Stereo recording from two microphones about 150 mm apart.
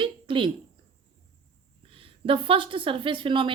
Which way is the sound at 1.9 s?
35° right (ahead or behind).